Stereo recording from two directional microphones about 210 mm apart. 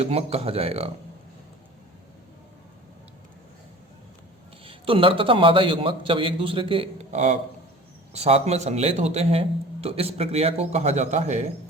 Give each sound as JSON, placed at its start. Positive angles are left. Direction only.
{"t": 0.0, "sound": "a man's voice", "side_deg": -30}
{"t": 4.6, "sound": "a man's voice", "side_deg": -25}